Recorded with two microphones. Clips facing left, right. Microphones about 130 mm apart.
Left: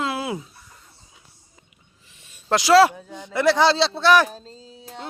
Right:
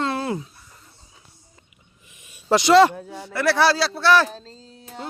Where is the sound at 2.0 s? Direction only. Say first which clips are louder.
Right 3 dB; 15° right (ahead or behind).